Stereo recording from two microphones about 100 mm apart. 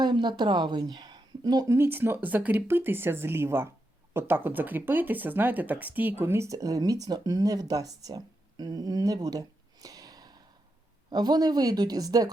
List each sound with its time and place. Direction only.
0.0 s speech: 50° right (ahead or behind)
1.7 s speech: 20° right (ahead or behind)